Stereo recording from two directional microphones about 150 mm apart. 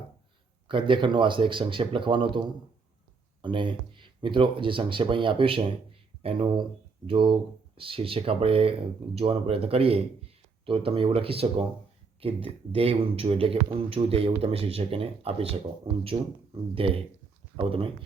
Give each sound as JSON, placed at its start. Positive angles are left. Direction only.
{"t": 0.7, "sound": "speech", "side_deg": -35}
{"t": 3.4, "sound": "speech", "side_deg": -35}